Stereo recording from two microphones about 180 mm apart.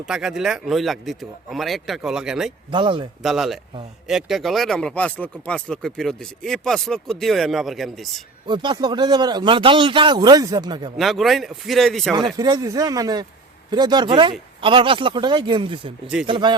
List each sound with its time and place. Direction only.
0.0 s speech: 5° right (ahead or behind)
2.6 s speech: 25° right (ahead or behind)
3.2 s speech: centre (ahead or behind)
8.4 s speech: 25° right (ahead or behind)
10.9 s speech: centre (ahead or behind)
12.4 s speech: 20° right (ahead or behind)